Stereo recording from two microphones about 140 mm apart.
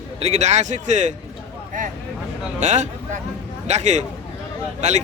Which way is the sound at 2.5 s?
60° right (ahead or behind).